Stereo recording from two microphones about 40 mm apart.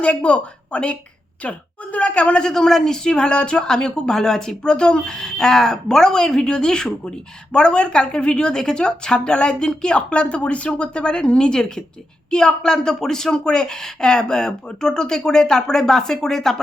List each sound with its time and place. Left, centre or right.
0.0 s speech: left
2.4 s a woman's voice: centre